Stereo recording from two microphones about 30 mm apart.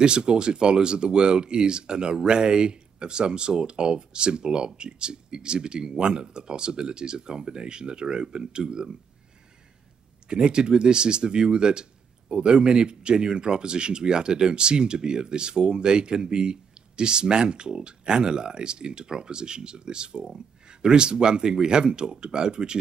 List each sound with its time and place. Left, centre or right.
0.0 s speech: right
10.2 s speech: right